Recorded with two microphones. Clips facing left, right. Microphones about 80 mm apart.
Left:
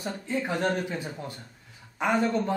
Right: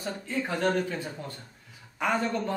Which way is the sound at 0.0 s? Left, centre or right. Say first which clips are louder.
Left 1 dB; centre.